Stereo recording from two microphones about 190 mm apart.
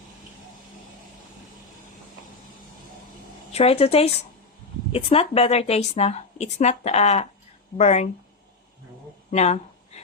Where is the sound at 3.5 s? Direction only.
30° left (ahead or behind).